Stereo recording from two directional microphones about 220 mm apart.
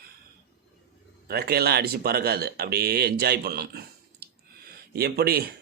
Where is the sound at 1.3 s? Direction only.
45° right (ahead or behind).